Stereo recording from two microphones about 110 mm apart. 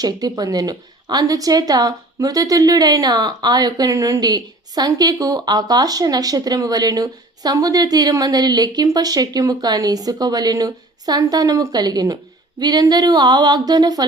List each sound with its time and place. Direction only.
0.0 s a woman's voice: 35° right (ahead or behind)